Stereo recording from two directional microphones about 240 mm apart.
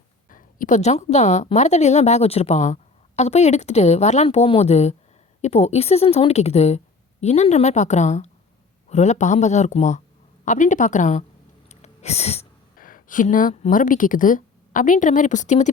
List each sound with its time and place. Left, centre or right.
0.3 s a woman's voice: left